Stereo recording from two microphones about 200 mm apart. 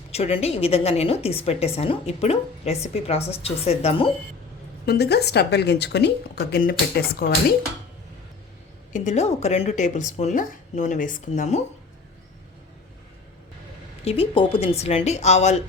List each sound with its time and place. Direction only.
0.1 s a woman's voice: 30° left (ahead or behind)
4.9 s a woman's voice: 55° left (ahead or behind)
8.9 s a woman's voice: 35° left (ahead or behind)
14.0 s a woman's voice: 30° left (ahead or behind)